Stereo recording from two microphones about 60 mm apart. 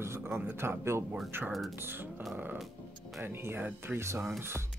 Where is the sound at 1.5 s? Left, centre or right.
Centre.